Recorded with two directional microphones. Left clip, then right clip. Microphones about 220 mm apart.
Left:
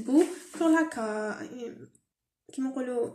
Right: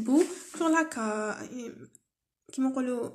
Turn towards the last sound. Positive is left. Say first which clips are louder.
# even
turn(degrees=-25)  # may be behind; listen again after turning